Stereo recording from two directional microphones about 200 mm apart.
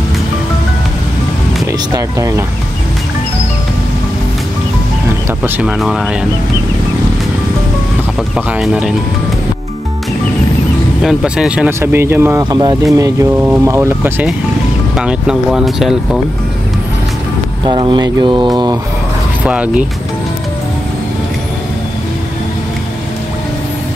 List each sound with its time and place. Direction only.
2.0 s speech: 15° right (ahead or behind)
5.4 s speech: 5° right (ahead or behind)
8.4 s speech: 5° right (ahead or behind)
11.0 s speech: 5° right (ahead or behind)
17.6 s speech: 25° right (ahead or behind)
19.4 s speech: 5° right (ahead or behind)